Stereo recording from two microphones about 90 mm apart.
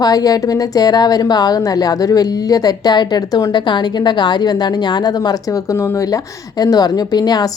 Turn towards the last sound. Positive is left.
turn(degrees=50)  # may be behind; listen again after turning